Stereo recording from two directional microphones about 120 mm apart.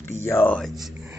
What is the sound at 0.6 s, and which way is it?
Speech, centre (ahead or behind).